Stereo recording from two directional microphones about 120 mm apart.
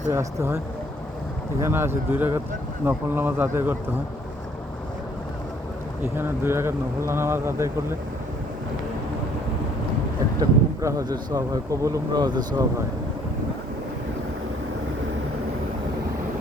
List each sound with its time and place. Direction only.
0.1 s speech: 25° right (ahead or behind)
1.6 s speech: 20° right (ahead or behind)
6.1 s speech: 20° right (ahead or behind)
10.4 s speech: 30° right (ahead or behind)